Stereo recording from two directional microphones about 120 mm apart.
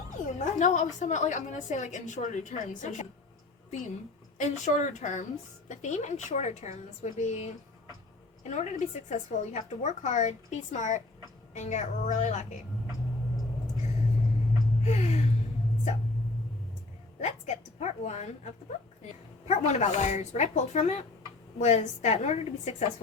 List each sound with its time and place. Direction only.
0.1 s a sound: 90° left
0.9 s a woman's voice: 90° left
4.4 s a woman's voice: 85° left
5.6 s a woman's voice: 75° left (ahead or behind)
14.8 s a sound: 70° left (ahead or behind)
17.2 s a woman's voice: 75° left (ahead or behind)